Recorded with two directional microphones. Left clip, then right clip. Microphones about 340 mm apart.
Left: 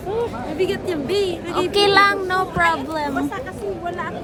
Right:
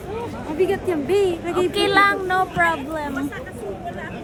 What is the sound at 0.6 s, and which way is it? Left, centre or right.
Speech, centre.